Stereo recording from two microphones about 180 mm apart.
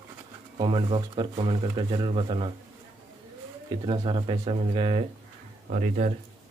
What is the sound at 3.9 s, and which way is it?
Speech, 30° right (ahead or behind).